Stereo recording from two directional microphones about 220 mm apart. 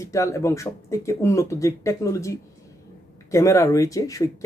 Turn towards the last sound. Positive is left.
turn(degrees=15)  # may be behind; listen again after turning